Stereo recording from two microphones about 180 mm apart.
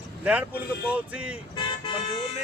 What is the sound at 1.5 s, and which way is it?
Car alarm, 30° left (ahead or behind).